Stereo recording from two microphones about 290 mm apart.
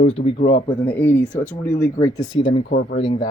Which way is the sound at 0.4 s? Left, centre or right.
Centre.